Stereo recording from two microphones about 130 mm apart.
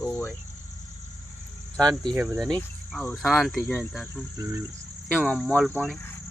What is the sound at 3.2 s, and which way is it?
Speech, centre (ahead or behind).